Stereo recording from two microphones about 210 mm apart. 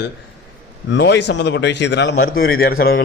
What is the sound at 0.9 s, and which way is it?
A man's voice, 55° left (ahead or behind).